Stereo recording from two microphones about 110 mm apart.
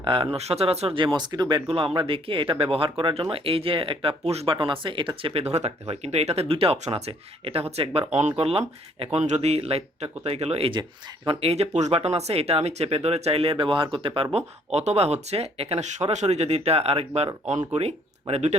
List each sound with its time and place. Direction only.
0.0 s speech: 50° right (ahead or behind)
1.9 s speech: 50° right (ahead or behind)
4.5 s speech: 50° right (ahead or behind); by 8.3 s 80° right
8.4 s speech: 60° right (ahead or behind)
14.3 s speech: 80° right